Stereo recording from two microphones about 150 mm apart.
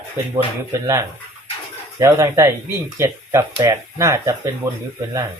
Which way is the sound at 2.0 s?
20° right (ahead or behind).